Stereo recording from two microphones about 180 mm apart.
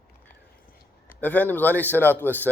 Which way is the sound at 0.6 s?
50° left (ahead or behind).